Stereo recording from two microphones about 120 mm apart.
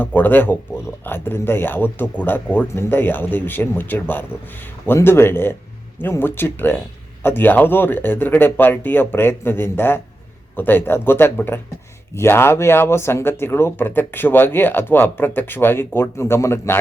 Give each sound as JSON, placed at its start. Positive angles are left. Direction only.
{"t": 0.0, "sound": "speech", "side_deg": 15}